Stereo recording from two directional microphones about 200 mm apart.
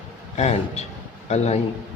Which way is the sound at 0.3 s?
35° left (ahead or behind).